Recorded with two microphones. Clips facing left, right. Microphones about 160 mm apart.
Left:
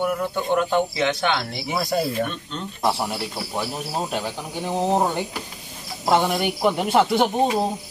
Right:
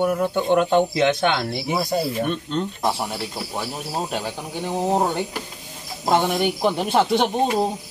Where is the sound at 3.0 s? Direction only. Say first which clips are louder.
Left 1 dB; centre (ahead or behind).